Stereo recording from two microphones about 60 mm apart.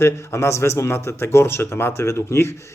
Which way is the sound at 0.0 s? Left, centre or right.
Left.